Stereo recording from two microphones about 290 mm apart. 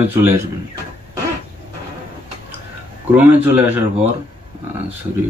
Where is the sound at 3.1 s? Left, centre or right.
Centre.